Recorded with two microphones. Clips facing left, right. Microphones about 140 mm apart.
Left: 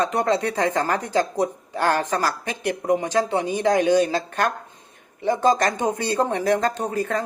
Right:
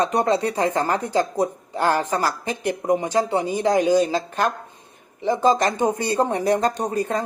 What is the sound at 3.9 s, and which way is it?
Speech, 10° right (ahead or behind).